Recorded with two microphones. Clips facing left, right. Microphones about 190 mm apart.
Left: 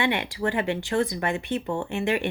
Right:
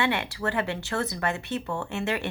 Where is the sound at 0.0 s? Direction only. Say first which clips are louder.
Left 2 dB; 15° left (ahead or behind).